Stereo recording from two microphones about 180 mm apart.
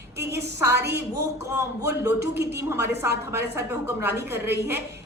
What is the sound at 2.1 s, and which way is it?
Speech, 65° right (ahead or behind).